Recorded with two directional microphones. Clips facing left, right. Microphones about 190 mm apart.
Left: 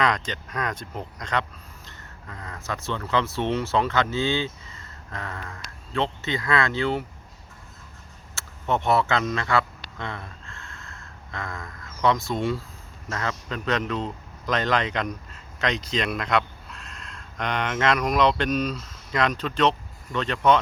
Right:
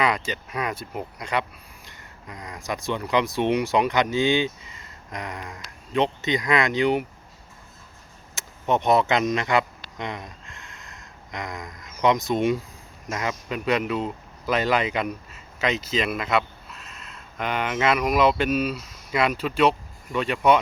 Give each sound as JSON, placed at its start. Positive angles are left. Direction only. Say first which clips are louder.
{"t": 0.0, "sound": "speech", "louder": "right 1 dB", "side_deg": -10}
{"t": 8.4, "sound": "a sound", "louder": "right 2 dB", "side_deg": -20}
{"t": 13.1, "sound": "speech", "louder": "right 2 dB", "side_deg": -15}